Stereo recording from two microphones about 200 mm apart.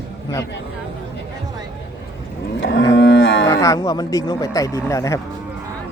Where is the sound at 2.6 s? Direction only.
65° left (ahead or behind).